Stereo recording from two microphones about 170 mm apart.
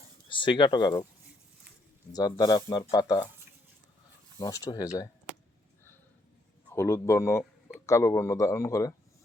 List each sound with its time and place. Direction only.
0.3 s speech: 30° left (ahead or behind)
2.1 s speech: 20° left (ahead or behind)
4.4 s speech: 20° left (ahead or behind)
6.7 s speech: 15° left (ahead or behind)